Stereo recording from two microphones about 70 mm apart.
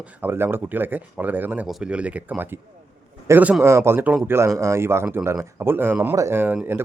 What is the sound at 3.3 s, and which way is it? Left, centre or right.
Speech, right.